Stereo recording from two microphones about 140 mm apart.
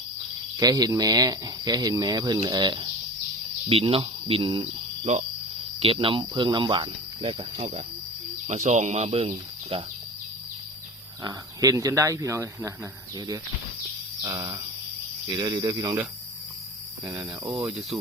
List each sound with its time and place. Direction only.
0.6 s speech: 25° right (ahead or behind); by 7.9 s 45° right (ahead or behind)
8.4 s speech: 55° right (ahead or behind)
11.2 s speech: 25° right (ahead or behind)
17.1 s speech: 20° right (ahead or behind)